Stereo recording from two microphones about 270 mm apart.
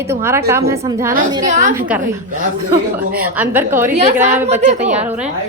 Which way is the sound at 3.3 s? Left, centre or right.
Centre.